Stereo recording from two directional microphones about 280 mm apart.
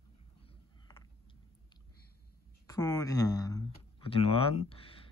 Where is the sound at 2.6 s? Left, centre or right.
Centre.